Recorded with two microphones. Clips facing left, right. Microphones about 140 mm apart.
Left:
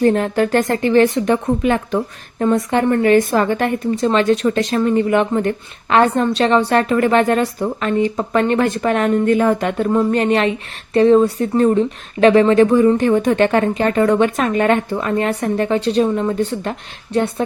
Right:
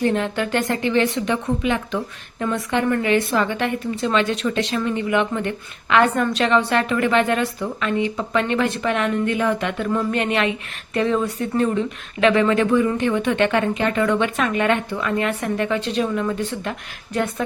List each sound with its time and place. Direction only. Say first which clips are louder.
0.0 s a woman's voice: left 6 dB; 40° left (ahead or behind)